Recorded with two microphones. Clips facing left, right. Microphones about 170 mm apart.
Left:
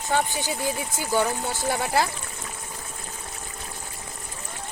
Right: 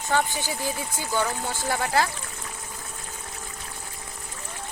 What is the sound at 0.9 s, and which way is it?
A woman's voice, 15° left (ahead or behind).